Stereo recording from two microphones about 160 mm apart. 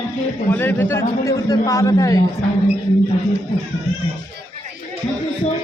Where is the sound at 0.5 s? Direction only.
15° left (ahead or behind).